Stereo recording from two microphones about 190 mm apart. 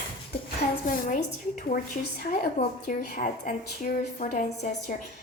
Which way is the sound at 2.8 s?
45° left (ahead or behind).